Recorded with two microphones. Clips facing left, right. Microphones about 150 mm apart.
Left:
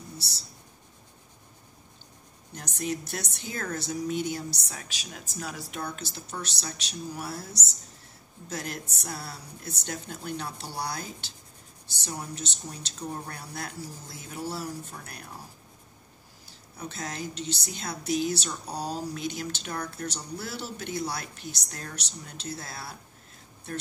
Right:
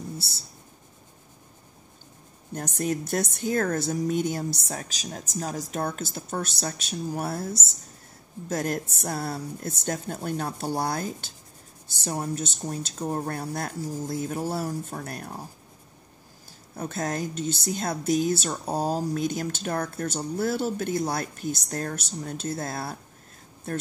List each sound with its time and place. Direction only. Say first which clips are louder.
2.5 s a woman's voice: right 5 dB; 50° right (ahead or behind)
16.7 s a woman's voice: right 7 dB; 50° right (ahead or behind)